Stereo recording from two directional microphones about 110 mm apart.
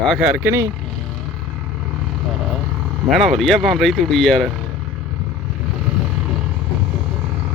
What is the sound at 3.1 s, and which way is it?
Speech, centre (ahead or behind).